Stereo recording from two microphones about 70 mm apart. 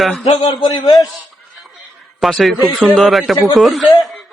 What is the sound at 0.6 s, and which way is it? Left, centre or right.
Speech, left.